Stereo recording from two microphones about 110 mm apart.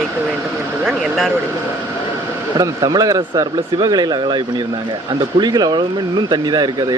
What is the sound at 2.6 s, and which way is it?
Speech, 35° right (ahead or behind).